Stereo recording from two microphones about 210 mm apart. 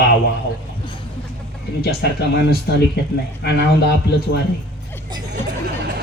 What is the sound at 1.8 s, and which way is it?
Speech, 50° left (ahead or behind).